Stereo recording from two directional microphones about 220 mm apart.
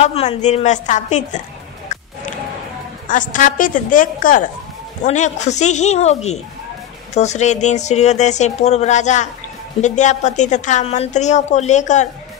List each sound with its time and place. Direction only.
0.0 s a woman's voice: 25° left (ahead or behind)
3.1 s a woman's voice: 35° left (ahead or behind)